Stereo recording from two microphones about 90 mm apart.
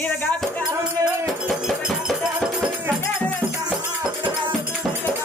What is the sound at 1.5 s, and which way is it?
Music, 5° right (ahead or behind).